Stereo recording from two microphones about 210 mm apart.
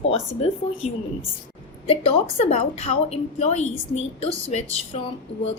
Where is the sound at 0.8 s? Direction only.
30° left (ahead or behind).